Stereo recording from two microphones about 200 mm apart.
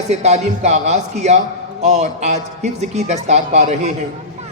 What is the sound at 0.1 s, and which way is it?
A man's voice, 35° right (ahead or behind).